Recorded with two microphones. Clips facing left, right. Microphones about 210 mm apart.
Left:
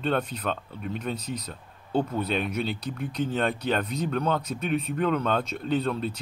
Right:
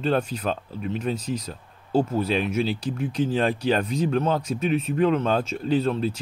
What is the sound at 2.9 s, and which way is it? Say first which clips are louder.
Speech: right 5 dB; 30° right (ahead or behind).